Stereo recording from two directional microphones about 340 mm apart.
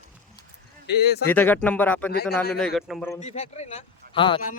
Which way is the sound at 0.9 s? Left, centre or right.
Left.